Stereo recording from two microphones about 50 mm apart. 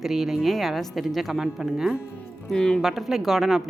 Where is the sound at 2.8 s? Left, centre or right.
Centre.